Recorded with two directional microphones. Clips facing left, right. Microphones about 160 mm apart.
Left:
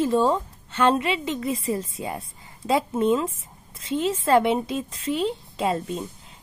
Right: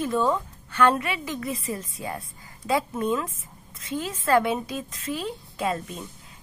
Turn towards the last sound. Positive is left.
turn(degrees=25)  # may be behind; listen again after turning